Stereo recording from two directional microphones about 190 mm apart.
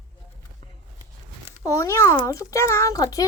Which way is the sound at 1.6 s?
15° left (ahead or behind).